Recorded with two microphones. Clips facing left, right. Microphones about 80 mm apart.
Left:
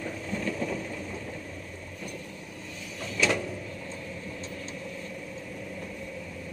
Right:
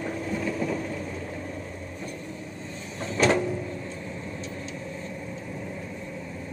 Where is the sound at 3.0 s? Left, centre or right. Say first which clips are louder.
Right 5 dB; right.